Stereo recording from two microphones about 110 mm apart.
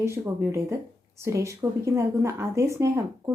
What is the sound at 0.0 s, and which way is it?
Speech, 25° right (ahead or behind).